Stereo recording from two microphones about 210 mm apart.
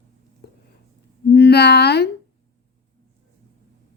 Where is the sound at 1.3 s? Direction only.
50° left (ahead or behind).